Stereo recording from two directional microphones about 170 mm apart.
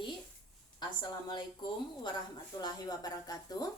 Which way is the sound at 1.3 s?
25° left (ahead or behind).